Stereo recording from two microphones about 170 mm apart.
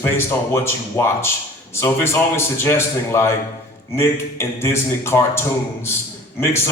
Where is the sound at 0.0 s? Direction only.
15° left (ahead or behind).